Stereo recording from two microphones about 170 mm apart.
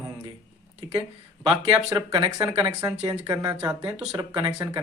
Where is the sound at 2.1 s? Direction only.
20° right (ahead or behind).